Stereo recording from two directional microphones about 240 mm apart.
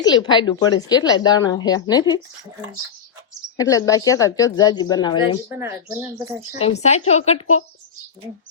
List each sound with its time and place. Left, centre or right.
0.0 s speech: centre
3.6 s speech: centre
5.5 s speech: centre
6.6 s a woman's voice: left